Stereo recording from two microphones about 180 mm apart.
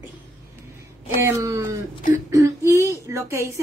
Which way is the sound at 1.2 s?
15° right (ahead or behind).